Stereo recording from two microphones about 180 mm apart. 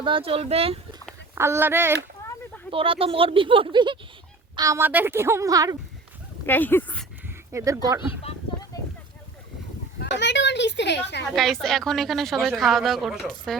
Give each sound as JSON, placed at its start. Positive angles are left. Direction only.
{"t": 0.0, "sound": "speech", "side_deg": -30}
{"t": 1.4, "sound": "a woman's voice", "side_deg": -15}
{"t": 2.6, "sound": "a woman's voice", "side_deg": -30}
{"t": 6.4, "sound": "speech", "side_deg": 10}
{"t": 7.5, "sound": "a woman's voice", "side_deg": -15}
{"t": 8.7, "sound": "a sound", "side_deg": 20}
{"t": 10.0, "sound": "speech", "side_deg": 75}
{"t": 11.3, "sound": "a woman's voice", "side_deg": 0}